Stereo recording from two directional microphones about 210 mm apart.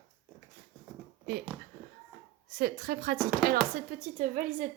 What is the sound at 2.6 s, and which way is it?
A woman's voice, 45° right (ahead or behind).